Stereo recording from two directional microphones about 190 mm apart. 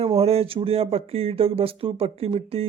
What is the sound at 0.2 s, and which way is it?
Speech, 30° right (ahead or behind).